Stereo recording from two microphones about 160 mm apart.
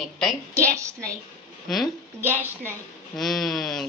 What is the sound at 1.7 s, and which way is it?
Speech, centre (ahead or behind).